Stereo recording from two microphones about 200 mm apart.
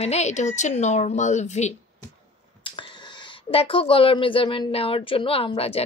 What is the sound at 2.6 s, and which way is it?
A woman's voice, 25° left (ahead or behind).